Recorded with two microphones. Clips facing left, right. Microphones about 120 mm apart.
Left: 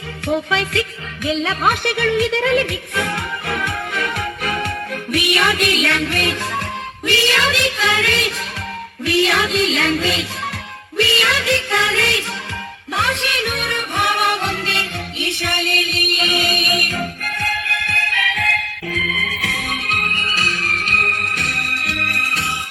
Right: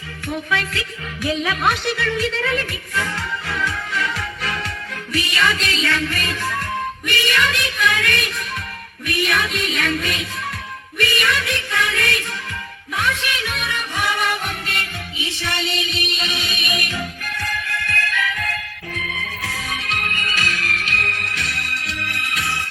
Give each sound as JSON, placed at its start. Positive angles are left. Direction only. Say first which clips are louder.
{"t": 1.2, "sound": "speech", "louder": "left 2 dB", "side_deg": 20}
{"t": 1.6, "sound": "music", "louder": "left 4 dB", "side_deg": 55}
{"t": 7.1, "sound": "music", "louder": "left 4 dB", "side_deg": 90}
{"t": 13.0, "sound": "music", "louder": "left 2 dB", "side_deg": 70}